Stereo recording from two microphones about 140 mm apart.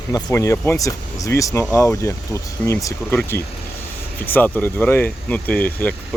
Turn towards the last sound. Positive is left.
turn(degrees=15)  # may be behind; listen again after turning